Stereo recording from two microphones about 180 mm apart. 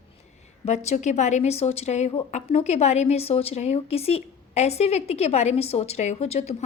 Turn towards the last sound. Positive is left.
turn(degrees=35)  # may be behind; listen again after turning